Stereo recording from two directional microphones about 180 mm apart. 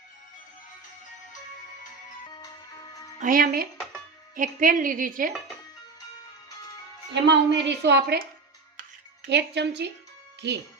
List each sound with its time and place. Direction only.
3.2 s a woman's voice: 50° right (ahead or behind)
7.1 s a woman's voice: 75° right (ahead or behind)
9.2 s a woman's voice: 70° right (ahead or behind)